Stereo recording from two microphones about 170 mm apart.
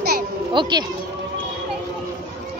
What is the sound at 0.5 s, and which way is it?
Speech, 25° right (ahead or behind).